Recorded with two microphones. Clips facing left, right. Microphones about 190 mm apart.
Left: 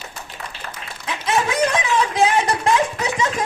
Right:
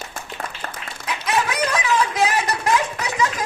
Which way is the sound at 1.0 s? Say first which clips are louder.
Left 2 dB; 25° left (ahead or behind).